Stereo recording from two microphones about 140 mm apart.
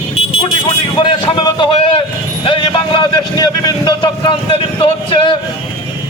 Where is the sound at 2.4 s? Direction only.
35° left (ahead or behind).